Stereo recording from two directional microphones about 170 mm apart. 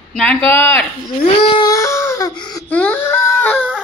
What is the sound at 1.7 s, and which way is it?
Baby cry, 15° left (ahead or behind).